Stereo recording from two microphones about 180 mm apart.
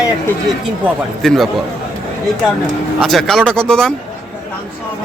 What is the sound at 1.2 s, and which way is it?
Speech, centre (ahead or behind).